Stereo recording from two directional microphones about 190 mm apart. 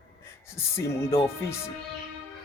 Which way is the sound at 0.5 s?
15° left (ahead or behind).